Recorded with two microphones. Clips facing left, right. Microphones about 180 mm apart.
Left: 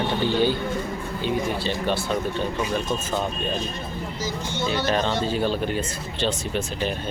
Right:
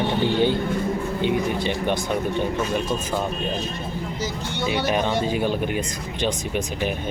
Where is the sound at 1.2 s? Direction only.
20° right (ahead or behind).